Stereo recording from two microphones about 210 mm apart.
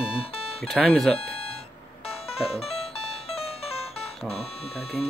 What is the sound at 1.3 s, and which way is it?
Music, 30° left (ahead or behind).